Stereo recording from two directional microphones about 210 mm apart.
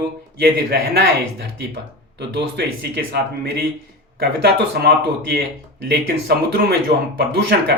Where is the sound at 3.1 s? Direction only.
55° right (ahead or behind).